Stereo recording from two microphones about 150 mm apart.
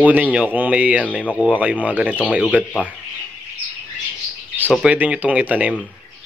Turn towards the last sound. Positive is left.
turn(degrees=-10)  # may be behind; listen again after turning